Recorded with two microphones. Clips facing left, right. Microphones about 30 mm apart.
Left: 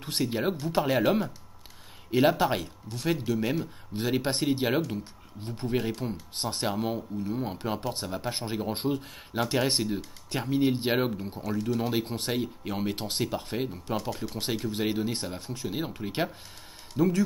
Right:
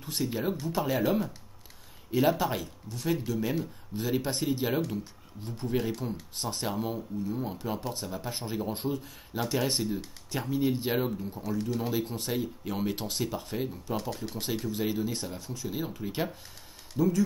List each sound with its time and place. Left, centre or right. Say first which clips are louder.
0.2 s speech: left 2 dB; left
12.7 s speech: left 1 dB; centre
16.9 s speech: left 2 dB; left